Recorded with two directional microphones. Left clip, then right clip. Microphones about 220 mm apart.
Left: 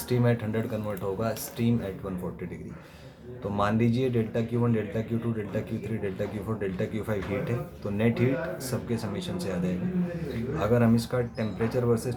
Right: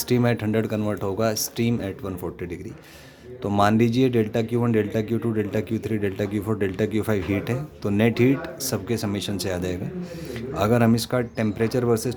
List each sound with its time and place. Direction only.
0.1 s speech: 45° right (ahead or behind)
3.4 s speech: 45° right (ahead or behind)